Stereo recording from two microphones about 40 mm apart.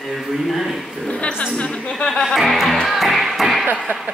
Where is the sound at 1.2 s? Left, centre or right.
Left.